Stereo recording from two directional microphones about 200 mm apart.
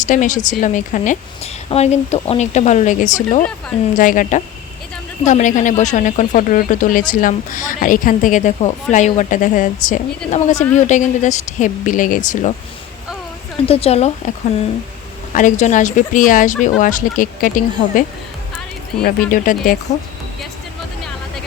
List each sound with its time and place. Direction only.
0.0 s a woman's voice: 40° left (ahead or behind)
13.7 s a woman's voice: 30° left (ahead or behind)
15.3 s a woman's voice: 40° left (ahead or behind)
19.0 s speech: 45° left (ahead or behind)